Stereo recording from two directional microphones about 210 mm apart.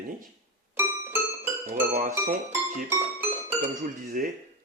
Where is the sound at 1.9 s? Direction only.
35° right (ahead or behind).